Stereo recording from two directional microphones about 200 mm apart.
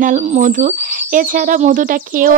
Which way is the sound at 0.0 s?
40° right (ahead or behind).